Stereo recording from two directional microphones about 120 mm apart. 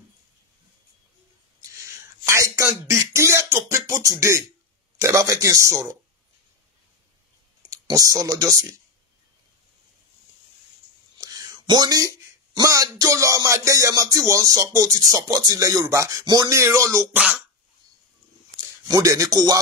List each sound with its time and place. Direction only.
1.6 s a sound: 25° right (ahead or behind)
5.0 s music: 25° right (ahead or behind)
7.7 s speech: 30° right (ahead or behind)
11.1 s whispering: 30° right (ahead or behind)
12.5 s music: 30° right (ahead or behind)
18.9 s speech: 30° right (ahead or behind)